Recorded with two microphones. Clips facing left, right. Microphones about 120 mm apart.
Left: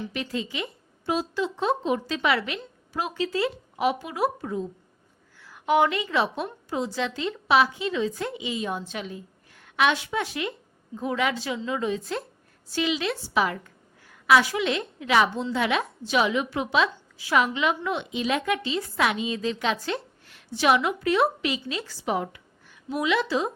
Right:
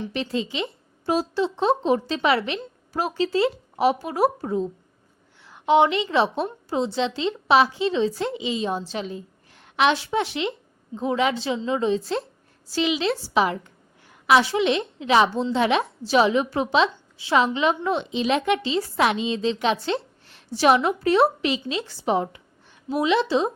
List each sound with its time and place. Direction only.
0.1 s a woman's voice: 30° right (ahead or behind)
1.0 s a woman's voice: 40° right (ahead or behind)
1.5 s a woman's voice: 30° right (ahead or behind)